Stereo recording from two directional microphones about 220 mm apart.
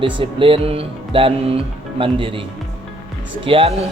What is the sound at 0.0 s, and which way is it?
Music, 25° right (ahead or behind).